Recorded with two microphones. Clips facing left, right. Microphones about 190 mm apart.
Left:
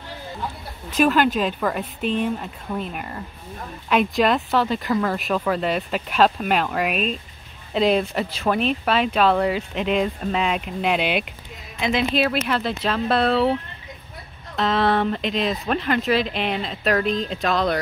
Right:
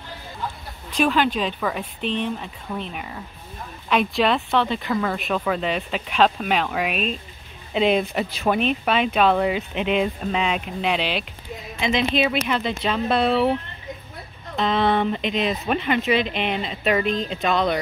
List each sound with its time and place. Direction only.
0.9 s speech: 5° left (ahead or behind)
4.2 s speech: 5° left (ahead or behind)
14.6 s speech: centre (ahead or behind)